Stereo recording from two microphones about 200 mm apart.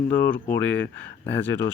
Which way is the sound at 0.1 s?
10° left (ahead or behind).